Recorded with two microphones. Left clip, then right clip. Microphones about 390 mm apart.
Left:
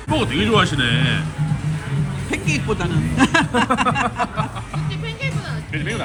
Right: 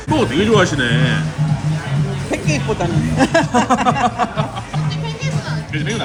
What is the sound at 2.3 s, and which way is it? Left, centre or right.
Speech, centre.